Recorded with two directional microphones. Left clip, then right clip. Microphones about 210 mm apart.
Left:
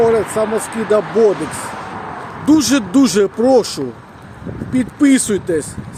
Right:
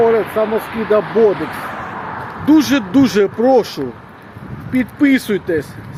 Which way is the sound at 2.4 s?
15° left (ahead or behind).